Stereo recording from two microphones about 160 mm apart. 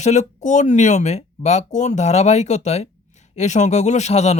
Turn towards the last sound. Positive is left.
turn(degrees=45)  # may be behind; listen again after turning